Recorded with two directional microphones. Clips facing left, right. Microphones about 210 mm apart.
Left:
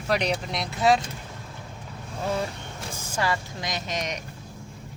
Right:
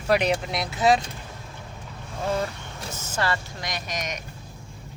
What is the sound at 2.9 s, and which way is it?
Speech, 10° left (ahead or behind).